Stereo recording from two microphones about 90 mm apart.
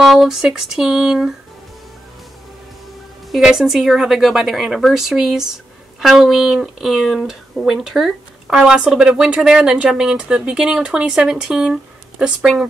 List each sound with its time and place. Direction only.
0.0 s speech: centre (ahead or behind)
3.3 s speech: 5° right (ahead or behind)